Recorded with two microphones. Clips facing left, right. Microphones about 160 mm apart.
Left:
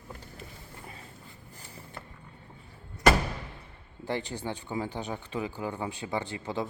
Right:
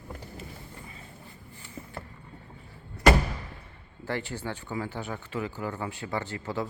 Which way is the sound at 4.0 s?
15° left (ahead or behind).